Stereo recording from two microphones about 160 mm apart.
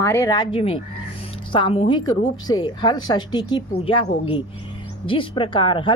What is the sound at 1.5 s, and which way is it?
A woman's voice, 35° left (ahead or behind).